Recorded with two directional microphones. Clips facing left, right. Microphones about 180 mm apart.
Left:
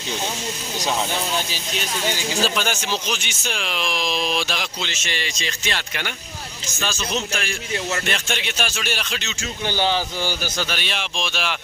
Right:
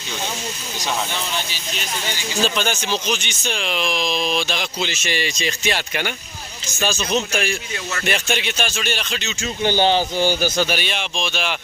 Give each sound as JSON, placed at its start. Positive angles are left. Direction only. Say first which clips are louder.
{"t": 2.6, "sound": "speech", "louder": "right 2 dB", "side_deg": 5}
{"t": 4.8, "sound": "speech", "louder": "right 5 dB", "side_deg": -10}
{"t": 9.6, "sound": "speech", "louder": "right 5 dB", "side_deg": -25}
{"t": 10.7, "sound": "speech", "louder": "right 4 dB", "side_deg": 0}